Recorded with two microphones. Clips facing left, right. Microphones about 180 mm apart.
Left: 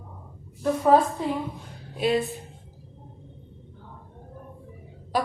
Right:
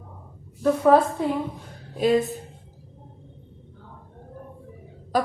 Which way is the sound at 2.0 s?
40° right (ahead or behind).